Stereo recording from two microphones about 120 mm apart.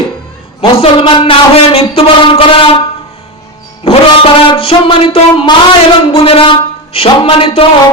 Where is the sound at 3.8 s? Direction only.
50° left (ahead or behind).